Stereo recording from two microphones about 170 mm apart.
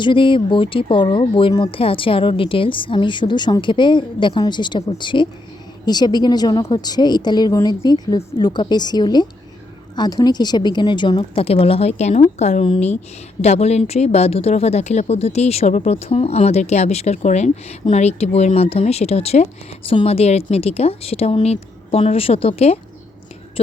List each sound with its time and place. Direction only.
0.0 s speech: 30° left (ahead or behind)